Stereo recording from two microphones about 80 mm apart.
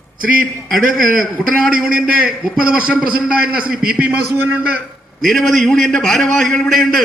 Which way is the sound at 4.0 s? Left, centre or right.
Right.